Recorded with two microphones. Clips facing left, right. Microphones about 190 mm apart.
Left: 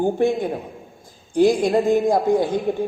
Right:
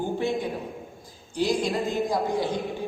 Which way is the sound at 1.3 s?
50° left (ahead or behind).